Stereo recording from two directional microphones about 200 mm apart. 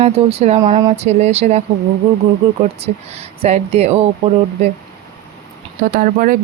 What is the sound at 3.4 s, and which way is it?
Speech, 35° right (ahead or behind).